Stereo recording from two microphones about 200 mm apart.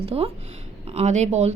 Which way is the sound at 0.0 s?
30° right (ahead or behind).